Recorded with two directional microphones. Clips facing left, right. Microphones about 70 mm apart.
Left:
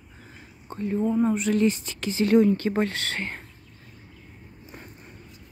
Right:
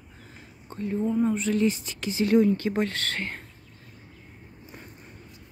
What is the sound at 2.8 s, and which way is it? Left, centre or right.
Speech, centre.